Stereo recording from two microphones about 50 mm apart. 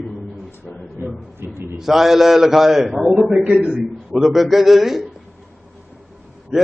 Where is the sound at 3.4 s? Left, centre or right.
Centre.